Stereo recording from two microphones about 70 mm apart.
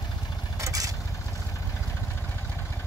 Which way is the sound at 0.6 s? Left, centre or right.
Right.